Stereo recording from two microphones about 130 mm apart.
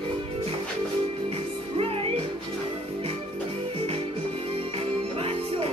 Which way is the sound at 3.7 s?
50° right (ahead or behind).